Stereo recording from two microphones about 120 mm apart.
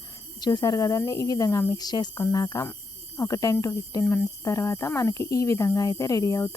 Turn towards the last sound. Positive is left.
turn(degrees=25)  # may be behind; listen again after turning